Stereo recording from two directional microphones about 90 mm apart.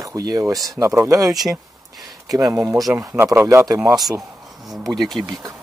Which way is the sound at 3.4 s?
30° right (ahead or behind).